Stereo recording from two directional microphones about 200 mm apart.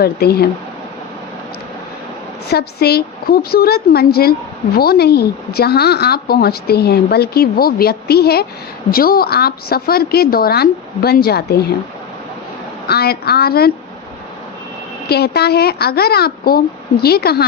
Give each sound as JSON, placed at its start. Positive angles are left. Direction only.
{"t": 0.0, "sound": "a woman's voice", "side_deg": 50}
{"t": 2.5, "sound": "a woman's voice", "side_deg": 55}
{"t": 12.9, "sound": "a woman's voice", "side_deg": 50}
{"t": 15.1, "sound": "a woman's voice", "side_deg": 55}